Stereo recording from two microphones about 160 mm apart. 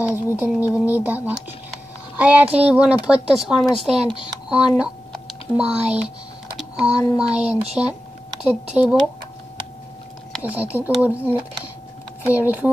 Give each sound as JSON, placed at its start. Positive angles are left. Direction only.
{"t": 0.0, "sound": "speech", "side_deg": -10}
{"t": 5.6, "sound": "typing", "side_deg": -5}
{"t": 7.2, "sound": "speech", "side_deg": -5}
{"t": 10.4, "sound": "speech", "side_deg": -10}